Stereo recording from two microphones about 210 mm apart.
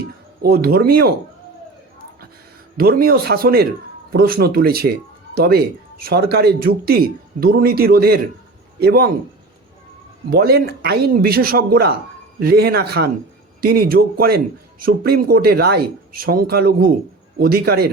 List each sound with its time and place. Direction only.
0.4 s speech: 45° right (ahead or behind)
2.7 s speech: 45° right (ahead or behind)
10.2 s speech: 50° right (ahead or behind)